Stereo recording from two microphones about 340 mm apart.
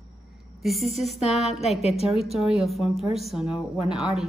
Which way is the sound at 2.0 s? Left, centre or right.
Centre.